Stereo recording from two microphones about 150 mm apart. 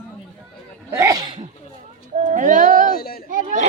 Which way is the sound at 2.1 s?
60° right (ahead or behind).